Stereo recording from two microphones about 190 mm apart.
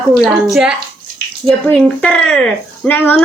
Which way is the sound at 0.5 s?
5° right (ahead or behind).